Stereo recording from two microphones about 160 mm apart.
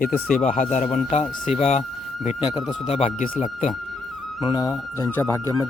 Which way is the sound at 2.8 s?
40° left (ahead or behind).